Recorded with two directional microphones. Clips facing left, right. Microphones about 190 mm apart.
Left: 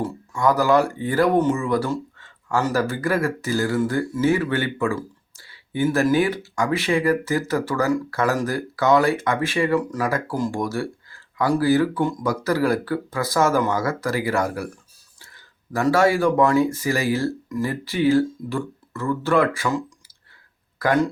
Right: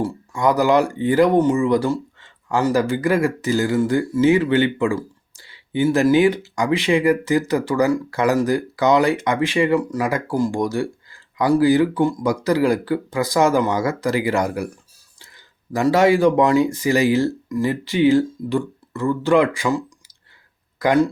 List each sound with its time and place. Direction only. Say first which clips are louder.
0.0 s speech: right 2 dB; 20° right (ahead or behind)